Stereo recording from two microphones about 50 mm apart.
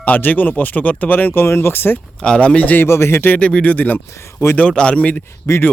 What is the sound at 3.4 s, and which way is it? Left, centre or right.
Speech, left.